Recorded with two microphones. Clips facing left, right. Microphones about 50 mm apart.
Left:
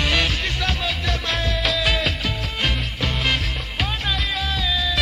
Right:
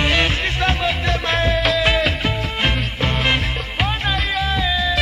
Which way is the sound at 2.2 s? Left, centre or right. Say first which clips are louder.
Right 4 dB; right.